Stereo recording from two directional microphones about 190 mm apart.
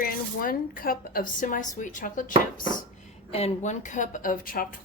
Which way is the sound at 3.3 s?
35° left (ahead or behind).